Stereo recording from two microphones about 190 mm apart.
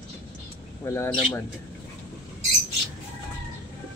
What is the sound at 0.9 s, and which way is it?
Speech, 15° left (ahead or behind).